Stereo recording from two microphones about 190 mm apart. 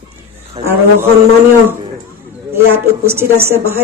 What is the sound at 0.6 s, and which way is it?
Speech, 30° right (ahead or behind).